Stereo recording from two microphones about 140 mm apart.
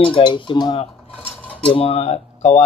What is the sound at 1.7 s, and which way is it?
Speech, 45° left (ahead or behind).